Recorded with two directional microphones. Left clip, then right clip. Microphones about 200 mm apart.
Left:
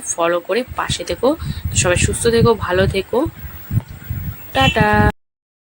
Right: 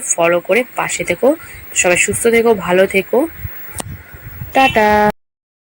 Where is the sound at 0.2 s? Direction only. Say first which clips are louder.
Right 4 dB; 10° left (ahead or behind).